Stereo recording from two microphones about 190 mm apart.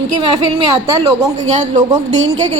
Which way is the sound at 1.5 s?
40° right (ahead or behind).